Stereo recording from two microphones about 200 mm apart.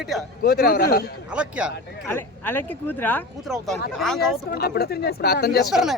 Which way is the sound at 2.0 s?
10° left (ahead or behind).